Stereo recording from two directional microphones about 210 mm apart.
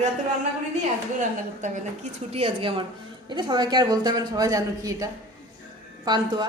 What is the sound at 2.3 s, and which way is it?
A man's voice, 25° right (ahead or behind).